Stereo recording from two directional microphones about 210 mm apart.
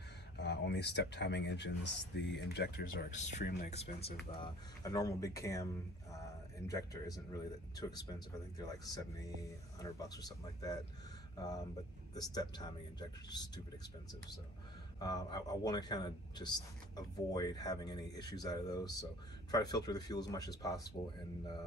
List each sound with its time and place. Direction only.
0.4 s speech: 55° left (ahead or behind); by 4.1 s 30° left (ahead or behind)
4.4 s speech: 15° left (ahead or behind)
6.7 s a man's voice: 15° left (ahead or behind)
15.0 s a man's voice: 20° left (ahead or behind)